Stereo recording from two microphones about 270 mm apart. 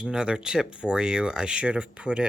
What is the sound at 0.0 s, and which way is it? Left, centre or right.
Speech, centre.